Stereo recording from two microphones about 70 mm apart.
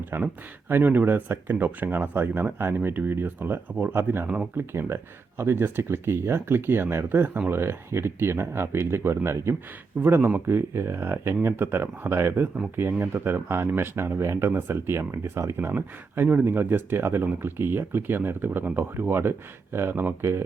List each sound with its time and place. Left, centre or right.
0.1 s speech: right
0.7 s speech: right